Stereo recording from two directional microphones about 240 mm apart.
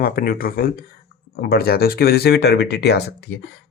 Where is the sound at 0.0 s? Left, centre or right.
Left.